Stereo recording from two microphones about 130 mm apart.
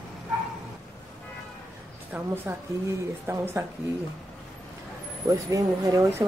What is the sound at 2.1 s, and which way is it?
A woman's voice, 15° right (ahead or behind).